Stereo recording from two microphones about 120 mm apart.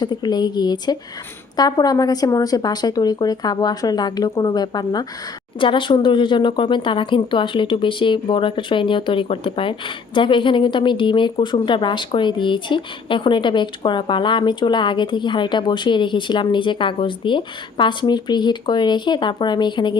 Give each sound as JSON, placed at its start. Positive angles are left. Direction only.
{"t": 0.0, "sound": "speech", "side_deg": 35}